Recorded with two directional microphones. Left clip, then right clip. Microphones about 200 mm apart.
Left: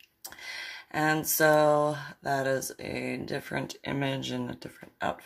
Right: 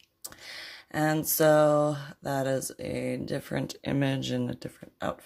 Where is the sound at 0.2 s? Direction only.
50° right (ahead or behind).